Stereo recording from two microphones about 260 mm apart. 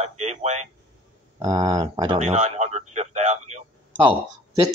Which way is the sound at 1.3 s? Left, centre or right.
Centre.